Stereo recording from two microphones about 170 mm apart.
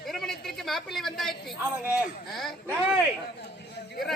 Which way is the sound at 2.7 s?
10° right (ahead or behind).